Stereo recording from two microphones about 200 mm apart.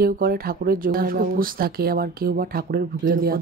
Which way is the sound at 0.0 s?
50° right (ahead or behind).